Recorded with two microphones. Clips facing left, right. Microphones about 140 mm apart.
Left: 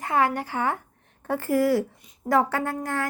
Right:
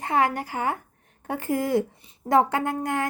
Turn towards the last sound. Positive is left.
turn(degrees=-20)  # may be behind; listen again after turning